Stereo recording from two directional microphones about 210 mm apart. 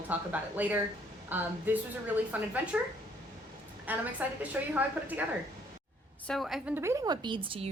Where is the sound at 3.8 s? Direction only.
10° right (ahead or behind).